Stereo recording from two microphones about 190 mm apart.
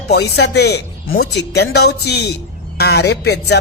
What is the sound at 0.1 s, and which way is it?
A woman's voice, 60° left (ahead or behind).